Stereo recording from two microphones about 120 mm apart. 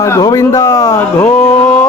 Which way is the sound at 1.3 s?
10° left (ahead or behind).